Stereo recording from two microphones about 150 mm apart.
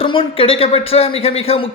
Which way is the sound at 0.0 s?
35° left (ahead or behind).